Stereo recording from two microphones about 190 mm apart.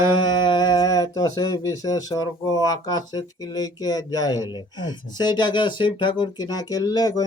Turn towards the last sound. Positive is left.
turn(degrees=20)  # may be behind; listen again after turning